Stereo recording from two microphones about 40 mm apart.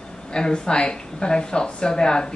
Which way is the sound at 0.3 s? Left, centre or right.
Left.